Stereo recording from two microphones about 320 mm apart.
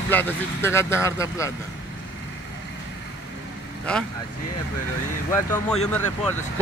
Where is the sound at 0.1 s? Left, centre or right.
Centre.